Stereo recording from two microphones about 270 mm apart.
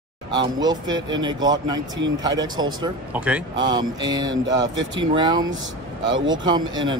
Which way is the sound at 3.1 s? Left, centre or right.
Centre.